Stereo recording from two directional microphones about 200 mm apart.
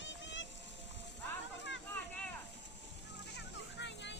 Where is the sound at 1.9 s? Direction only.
5° left (ahead or behind).